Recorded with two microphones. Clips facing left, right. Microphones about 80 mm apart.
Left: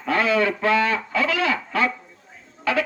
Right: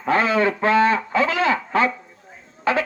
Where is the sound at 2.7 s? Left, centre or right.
Right.